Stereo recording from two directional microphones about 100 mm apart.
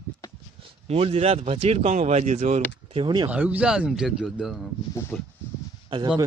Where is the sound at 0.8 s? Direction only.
85° right.